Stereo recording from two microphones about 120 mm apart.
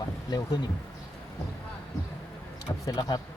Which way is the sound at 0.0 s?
35° left (ahead or behind).